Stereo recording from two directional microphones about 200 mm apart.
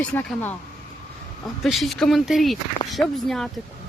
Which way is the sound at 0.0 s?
5° left (ahead or behind).